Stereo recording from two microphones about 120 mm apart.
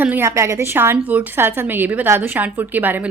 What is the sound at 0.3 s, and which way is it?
A woman's voice, 25° right (ahead or behind).